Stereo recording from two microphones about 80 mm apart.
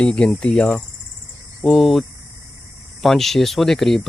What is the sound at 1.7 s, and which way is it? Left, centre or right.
Speech, centre.